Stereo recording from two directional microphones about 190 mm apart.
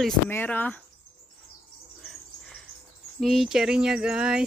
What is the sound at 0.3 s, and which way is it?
Speech, 10° left (ahead or behind).